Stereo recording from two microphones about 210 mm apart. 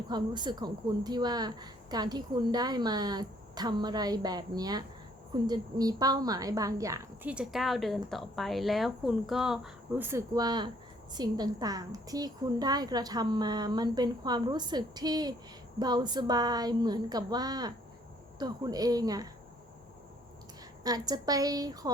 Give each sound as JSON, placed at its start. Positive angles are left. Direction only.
{"t": 0.1, "sound": "a woman's voice", "side_deg": -20}
{"t": 20.8, "sound": "a woman's voice", "side_deg": -20}